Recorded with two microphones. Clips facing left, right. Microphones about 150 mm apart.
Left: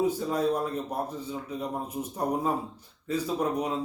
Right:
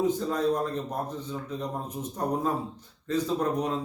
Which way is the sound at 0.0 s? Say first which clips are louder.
Even; 10° left (ahead or behind).